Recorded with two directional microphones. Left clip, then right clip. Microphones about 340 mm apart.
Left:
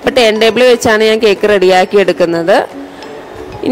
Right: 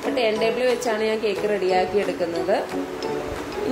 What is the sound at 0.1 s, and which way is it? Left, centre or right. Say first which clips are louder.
Speech: left 13 dB; left.